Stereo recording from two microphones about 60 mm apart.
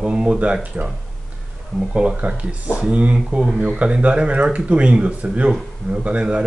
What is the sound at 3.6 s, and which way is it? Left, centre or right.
Speech, centre.